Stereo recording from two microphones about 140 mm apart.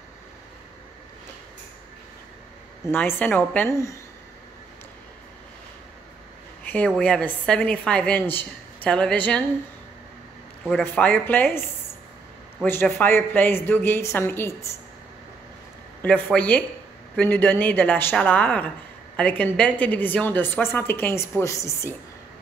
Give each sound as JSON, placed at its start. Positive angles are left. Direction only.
{"t": 2.9, "sound": "a woman's voice", "side_deg": 15}
{"t": 7.0, "sound": "a woman's voice", "side_deg": 10}
{"t": 10.8, "sound": "a woman's voice", "side_deg": 15}
{"t": 12.6, "sound": "a woman's voice", "side_deg": 15}
{"t": 16.0, "sound": "a woman's voice", "side_deg": 10}